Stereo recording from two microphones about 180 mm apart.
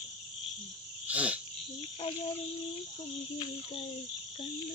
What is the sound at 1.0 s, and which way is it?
Cricket, 10° right (ahead or behind).